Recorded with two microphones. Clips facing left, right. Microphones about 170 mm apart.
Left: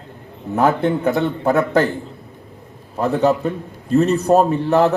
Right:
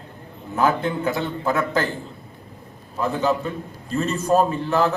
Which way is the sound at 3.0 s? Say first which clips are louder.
Left 5 dB; 65° left (ahead or behind).